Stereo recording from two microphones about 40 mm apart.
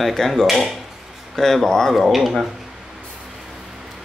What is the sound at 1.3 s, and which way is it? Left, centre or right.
Speech, centre.